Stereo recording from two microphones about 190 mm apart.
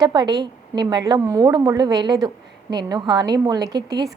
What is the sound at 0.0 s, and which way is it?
A woman's voice, 25° right (ahead or behind).